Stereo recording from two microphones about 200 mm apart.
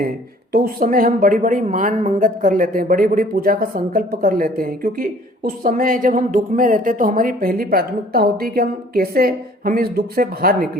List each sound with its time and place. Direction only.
0.5 s a woman's voice: 45° right (ahead or behind)